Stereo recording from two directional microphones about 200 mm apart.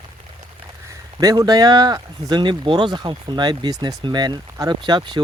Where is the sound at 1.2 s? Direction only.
20° right (ahead or behind).